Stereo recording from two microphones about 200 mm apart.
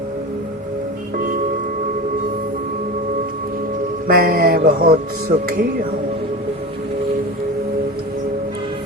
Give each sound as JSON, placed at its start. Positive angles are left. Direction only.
{"t": 4.1, "sound": "music", "side_deg": -50}